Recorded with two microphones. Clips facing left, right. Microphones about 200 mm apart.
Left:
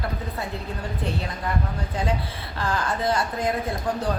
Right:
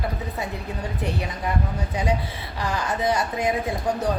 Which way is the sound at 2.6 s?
15° right (ahead or behind).